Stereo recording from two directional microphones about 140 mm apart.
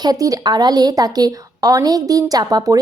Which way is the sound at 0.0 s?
25° right (ahead or behind).